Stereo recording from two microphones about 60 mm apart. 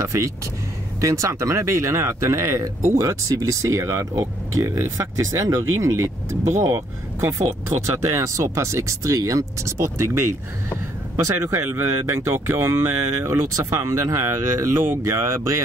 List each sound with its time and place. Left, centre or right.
0.0 s speech: right
4.8 s speech: right
8.1 s speech: right